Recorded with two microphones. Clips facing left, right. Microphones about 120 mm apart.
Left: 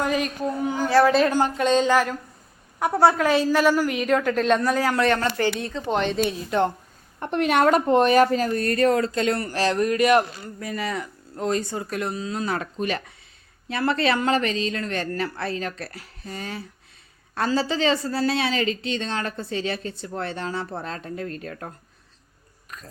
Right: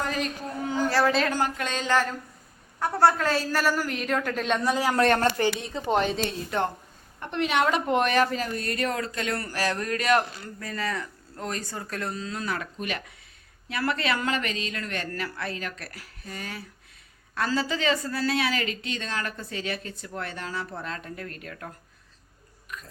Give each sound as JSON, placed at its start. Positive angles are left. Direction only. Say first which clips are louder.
{"t": 0.9, "sound": "speech", "louder": "left 8 dB", "side_deg": 15}
{"t": 2.8, "sound": "a woman's voice", "louder": "left 3 dB", "side_deg": 10}
{"t": 4.6, "sound": "speech", "louder": "left 3 dB", "side_deg": -20}
{"t": 4.9, "sound": "speech", "louder": "even", "side_deg": -45}
{"t": 5.5, "sound": "a woman's voice", "louder": "left 1 dB", "side_deg": 0}
{"t": 7.2, "sound": "speech", "louder": "left 5 dB", "side_deg": 50}
{"t": 12.5, "sound": "speech", "louder": "left 6 dB", "side_deg": 35}